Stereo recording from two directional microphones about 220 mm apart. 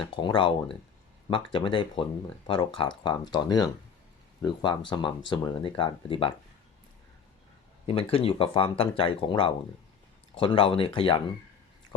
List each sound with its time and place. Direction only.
0.1 s speech: 20° left (ahead or behind)
7.9 s speech: 25° left (ahead or behind)